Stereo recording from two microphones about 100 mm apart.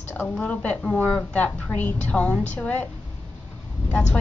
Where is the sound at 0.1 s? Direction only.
15° left (ahead or behind).